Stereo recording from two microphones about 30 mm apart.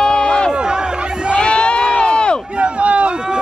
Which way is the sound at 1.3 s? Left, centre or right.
Left.